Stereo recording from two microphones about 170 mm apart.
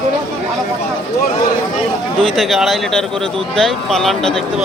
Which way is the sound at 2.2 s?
Centre (ahead or behind).